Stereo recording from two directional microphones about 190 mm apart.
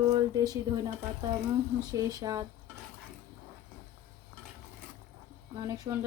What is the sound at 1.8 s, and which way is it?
Speech, 20° right (ahead or behind).